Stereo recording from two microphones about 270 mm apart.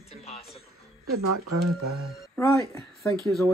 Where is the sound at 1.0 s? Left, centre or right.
Right.